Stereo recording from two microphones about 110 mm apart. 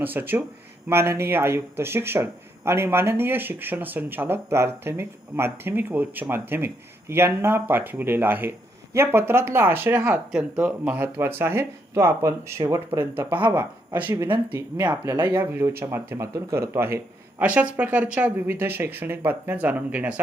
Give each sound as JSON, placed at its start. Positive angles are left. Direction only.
{"t": 0.0, "sound": "speech", "side_deg": -15}
{"t": 10.3, "sound": "speech", "side_deg": -10}
{"t": 13.1, "sound": "speech", "side_deg": -15}
{"t": 17.4, "sound": "speech", "side_deg": -15}